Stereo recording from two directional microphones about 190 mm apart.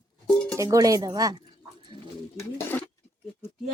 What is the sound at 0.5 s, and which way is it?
Speech, 15° right (ahead or behind).